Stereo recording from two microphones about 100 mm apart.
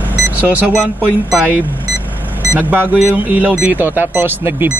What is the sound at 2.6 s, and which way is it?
Speech, 15° right (ahead or behind).